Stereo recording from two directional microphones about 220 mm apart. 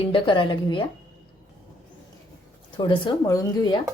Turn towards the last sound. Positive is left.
turn(degrees=15)  # may be behind; listen again after turning